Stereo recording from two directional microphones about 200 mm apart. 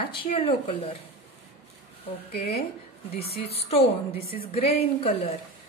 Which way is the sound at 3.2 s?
50° left (ahead or behind).